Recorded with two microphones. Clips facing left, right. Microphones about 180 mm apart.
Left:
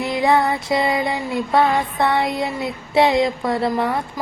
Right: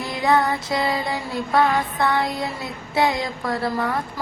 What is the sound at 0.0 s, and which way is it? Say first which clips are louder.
Music: left 3 dB; 20° left (ahead or behind).